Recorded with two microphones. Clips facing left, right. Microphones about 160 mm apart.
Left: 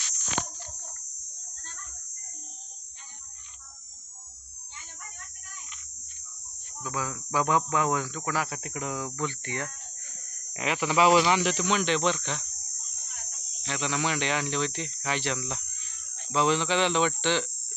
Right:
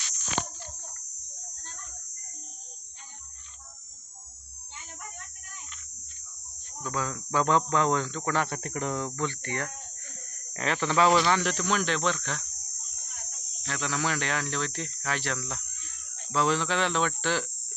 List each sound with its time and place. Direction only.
6.8 s speech: 10° left (ahead or behind)
9.1 s speech: 15° left (ahead or behind); by 12.5 s centre (ahead or behind)
13.7 s speech: centre (ahead or behind)